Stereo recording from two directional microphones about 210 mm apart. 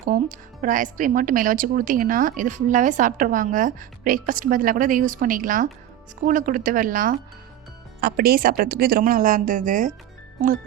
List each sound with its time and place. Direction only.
0.1 s a woman's voice: 40° right (ahead or behind)